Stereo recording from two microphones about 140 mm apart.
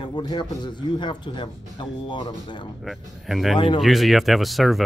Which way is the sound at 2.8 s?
Centre (ahead or behind).